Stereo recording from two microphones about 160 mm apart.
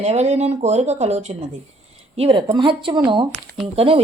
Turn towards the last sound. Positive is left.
turn(degrees=-35)  # may be behind; listen again after turning